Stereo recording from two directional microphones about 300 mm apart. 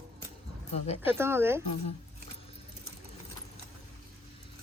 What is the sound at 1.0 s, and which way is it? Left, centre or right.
Speech, centre.